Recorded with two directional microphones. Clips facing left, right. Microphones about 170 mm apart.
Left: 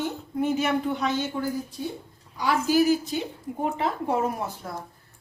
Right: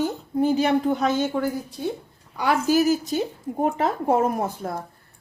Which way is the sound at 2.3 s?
50° right (ahead or behind).